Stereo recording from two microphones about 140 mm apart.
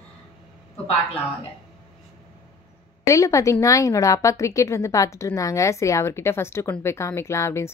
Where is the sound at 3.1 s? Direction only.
20° left (ahead or behind).